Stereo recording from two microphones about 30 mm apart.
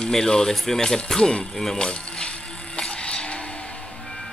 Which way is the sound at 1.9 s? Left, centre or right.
Left.